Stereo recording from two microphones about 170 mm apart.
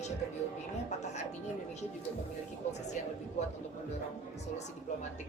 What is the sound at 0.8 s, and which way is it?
Music, 40° left (ahead or behind).